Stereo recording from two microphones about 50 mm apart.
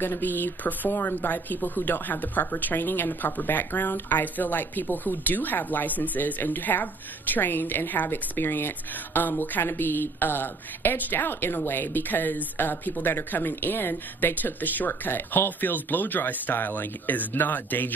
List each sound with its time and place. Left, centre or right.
0.0 s speech: left